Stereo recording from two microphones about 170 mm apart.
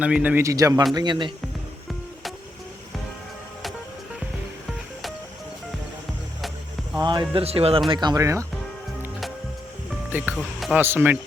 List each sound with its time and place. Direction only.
0.0 s a man's voice: 10° right (ahead or behind); by 1.3 s 25° right (ahead or behind)
7.0 s speech: 25° right (ahead or behind)
7.9 s speech: 25° right (ahead or behind)
10.1 s speech: 10° right (ahead or behind)
10.3 s speech: centre (ahead or behind)
10.8 s a man's voice: 10° right (ahead or behind)